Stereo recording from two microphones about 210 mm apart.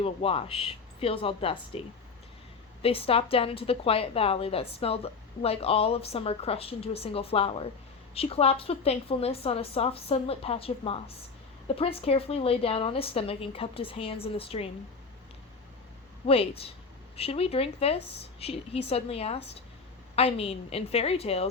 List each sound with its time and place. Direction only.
0.0 s a woman's voice: 25° left (ahead or behind)
2.8 s a woman's voice: 25° left (ahead or behind)
16.2 s a woman's voice: 25° left (ahead or behind)